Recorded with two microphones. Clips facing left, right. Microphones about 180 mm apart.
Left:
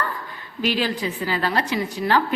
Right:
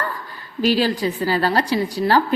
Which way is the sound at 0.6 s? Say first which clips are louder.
Right 5 dB; 35° right (ahead or behind).